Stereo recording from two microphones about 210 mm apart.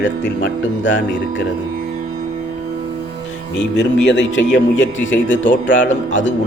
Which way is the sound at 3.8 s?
60° left (ahead or behind).